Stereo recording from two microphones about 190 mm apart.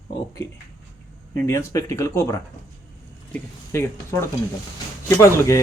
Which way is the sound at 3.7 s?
15° left (ahead or behind).